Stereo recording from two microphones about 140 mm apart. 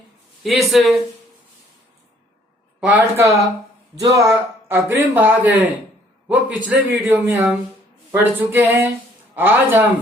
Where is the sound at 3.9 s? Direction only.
25° right (ahead or behind).